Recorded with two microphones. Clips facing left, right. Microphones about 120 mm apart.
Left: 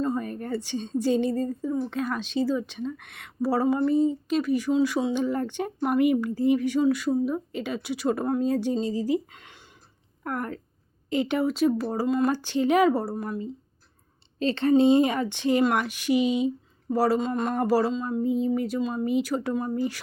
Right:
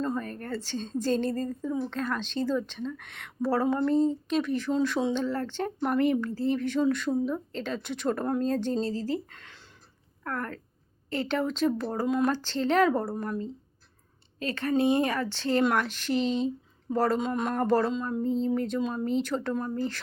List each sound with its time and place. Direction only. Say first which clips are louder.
0.0 s a sound: left 3 dB; 10° left (ahead or behind)
0.9 s speech: left 3 dB; 10° left (ahead or behind)
14.3 s a woman's voice: left 6 dB; 25° left (ahead or behind)